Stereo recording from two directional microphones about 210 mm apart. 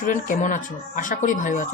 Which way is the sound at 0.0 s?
40° left (ahead or behind).